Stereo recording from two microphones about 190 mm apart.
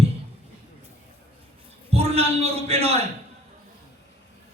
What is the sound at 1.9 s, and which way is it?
A man's voice, 30° right (ahead or behind).